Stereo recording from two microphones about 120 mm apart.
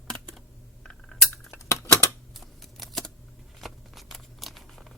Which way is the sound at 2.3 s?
Centre (ahead or behind).